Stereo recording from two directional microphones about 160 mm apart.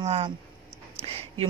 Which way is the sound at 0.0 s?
40° right (ahead or behind).